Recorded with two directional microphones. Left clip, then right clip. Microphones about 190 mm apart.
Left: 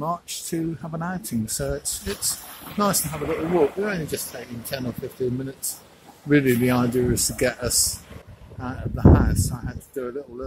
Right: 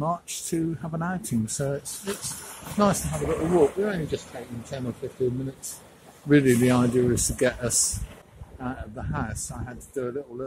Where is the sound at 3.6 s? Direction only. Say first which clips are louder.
Even; 5° right (ahead or behind).